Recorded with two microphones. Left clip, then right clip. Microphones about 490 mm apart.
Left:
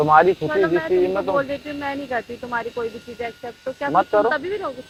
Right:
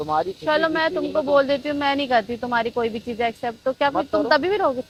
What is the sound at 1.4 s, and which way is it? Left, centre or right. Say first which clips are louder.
Speech: right 4 dB; right.